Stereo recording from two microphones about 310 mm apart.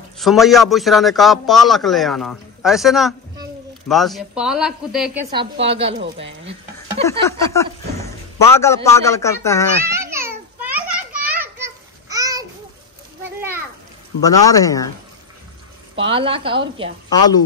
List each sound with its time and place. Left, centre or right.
0.2 s a man's voice: centre
5.3 s a woman's voice: centre
7.1 s a man's voice: centre
9.8 s babbling: centre
11.4 s a sound: centre
14.2 s speech: centre
16.0 s a woman's voice: centre
17.1 s speech: centre